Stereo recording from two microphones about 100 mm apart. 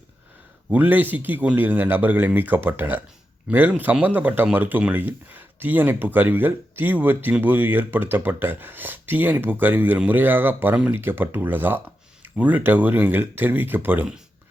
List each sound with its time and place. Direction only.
0.7 s speech: 15° right (ahead or behind)